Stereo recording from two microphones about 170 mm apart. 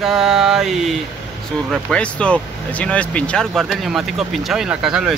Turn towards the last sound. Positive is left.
turn(degrees=-5)  # may be behind; listen again after turning